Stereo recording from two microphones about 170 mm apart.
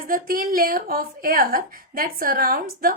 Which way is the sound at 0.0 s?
55° right (ahead or behind).